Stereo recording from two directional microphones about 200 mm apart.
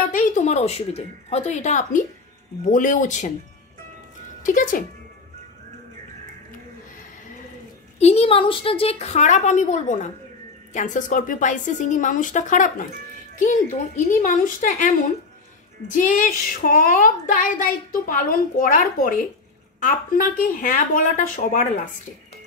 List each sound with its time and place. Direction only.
0.1 s a woman's voice: 40° left (ahead or behind)
4.4 s speech: 40° left (ahead or behind)
8.0 s a woman's voice: 30° left (ahead or behind)
15.9 s a woman's voice: 40° left (ahead or behind)